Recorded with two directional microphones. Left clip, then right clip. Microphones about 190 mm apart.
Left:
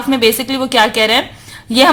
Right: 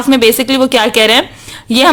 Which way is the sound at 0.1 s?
25° right (ahead or behind).